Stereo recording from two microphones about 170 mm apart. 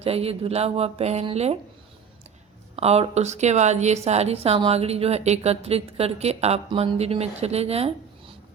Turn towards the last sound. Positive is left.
turn(degrees=-35)  # may be behind; listen again after turning